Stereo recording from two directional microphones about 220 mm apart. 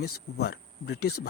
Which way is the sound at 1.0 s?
90° left.